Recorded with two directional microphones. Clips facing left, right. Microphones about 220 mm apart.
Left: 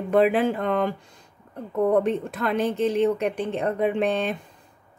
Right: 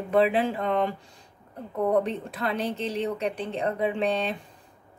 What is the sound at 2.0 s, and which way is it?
A woman's voice, 50° left (ahead or behind).